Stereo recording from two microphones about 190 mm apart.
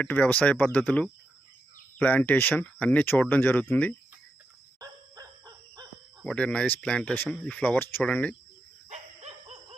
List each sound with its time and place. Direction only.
0.0 s speech: 10° left (ahead or behind)
4.8 s dog: 20° right (ahead or behind)
6.2 s speech: 5° left (ahead or behind)
8.9 s a sound: 35° right (ahead or behind)